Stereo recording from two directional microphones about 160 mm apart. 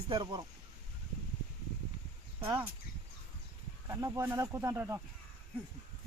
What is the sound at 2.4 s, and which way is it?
Speech, 15° right (ahead or behind).